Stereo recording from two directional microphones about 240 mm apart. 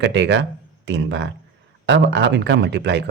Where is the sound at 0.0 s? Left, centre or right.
Right.